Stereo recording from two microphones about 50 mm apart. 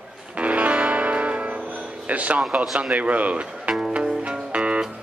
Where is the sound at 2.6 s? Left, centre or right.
Centre.